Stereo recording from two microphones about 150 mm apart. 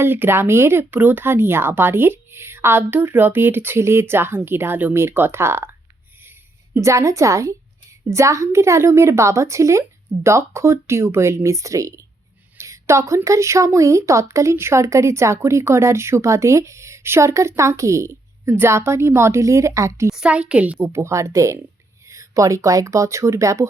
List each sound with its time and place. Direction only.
0.0 s speech: 15° right (ahead or behind)
6.7 s a woman's voice: 20° right (ahead or behind)
20.1 s speech: 5° right (ahead or behind)